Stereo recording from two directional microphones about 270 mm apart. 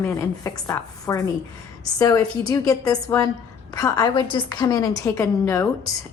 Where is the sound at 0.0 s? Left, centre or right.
Centre.